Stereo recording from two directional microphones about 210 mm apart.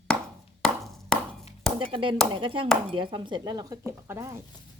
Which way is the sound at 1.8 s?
25° right (ahead or behind).